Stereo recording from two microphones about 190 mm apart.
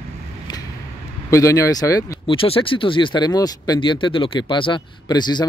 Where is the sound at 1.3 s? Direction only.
15° left (ahead or behind).